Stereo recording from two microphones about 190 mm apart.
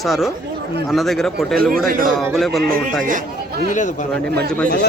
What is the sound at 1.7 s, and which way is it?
Speech, 50° right (ahead or behind).